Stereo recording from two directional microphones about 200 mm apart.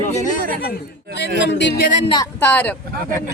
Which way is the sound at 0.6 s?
55° left (ahead or behind).